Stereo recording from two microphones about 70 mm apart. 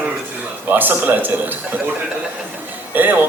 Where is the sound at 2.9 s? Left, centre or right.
Right.